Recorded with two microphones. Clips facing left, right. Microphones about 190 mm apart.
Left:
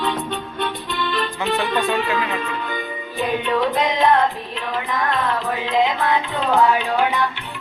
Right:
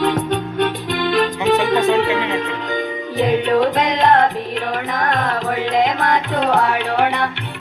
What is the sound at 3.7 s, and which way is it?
Music, 75° right (ahead or behind).